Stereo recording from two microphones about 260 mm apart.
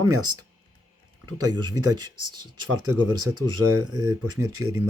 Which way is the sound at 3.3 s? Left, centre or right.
Right.